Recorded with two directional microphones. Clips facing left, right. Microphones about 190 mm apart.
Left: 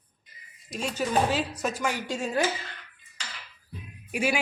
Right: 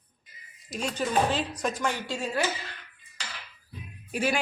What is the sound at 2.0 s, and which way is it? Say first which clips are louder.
Speech: left 2 dB; 20° left (ahead or behind).